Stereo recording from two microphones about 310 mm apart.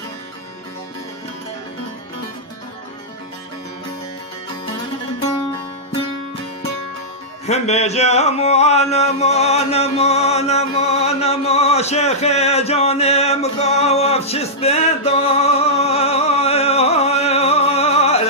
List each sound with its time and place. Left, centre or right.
7.4 s speech: left